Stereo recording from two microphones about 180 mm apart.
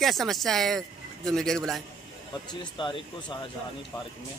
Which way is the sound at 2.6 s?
25° left (ahead or behind).